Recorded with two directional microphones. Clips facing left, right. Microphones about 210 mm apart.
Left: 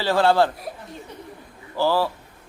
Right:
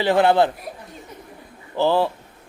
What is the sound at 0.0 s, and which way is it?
Speech, 20° right (ahead or behind).